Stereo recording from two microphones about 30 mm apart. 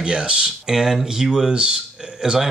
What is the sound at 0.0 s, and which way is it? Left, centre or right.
Speech, right.